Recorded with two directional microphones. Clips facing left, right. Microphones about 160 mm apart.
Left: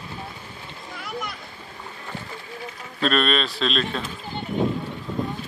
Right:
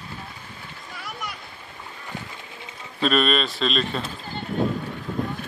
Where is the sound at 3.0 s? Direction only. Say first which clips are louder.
Right 1 dB; centre (ahead or behind).